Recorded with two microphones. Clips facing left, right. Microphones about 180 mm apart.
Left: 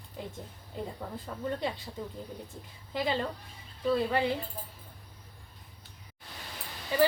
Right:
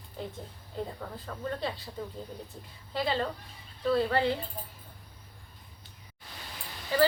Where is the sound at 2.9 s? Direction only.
15° left (ahead or behind).